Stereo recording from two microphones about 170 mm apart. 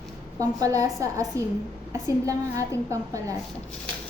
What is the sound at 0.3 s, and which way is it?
A woman's voice, 20° right (ahead or behind).